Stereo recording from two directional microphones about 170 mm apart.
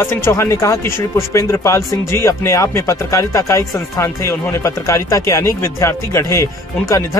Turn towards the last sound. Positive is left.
turn(degrees=20)  # may be behind; listen again after turning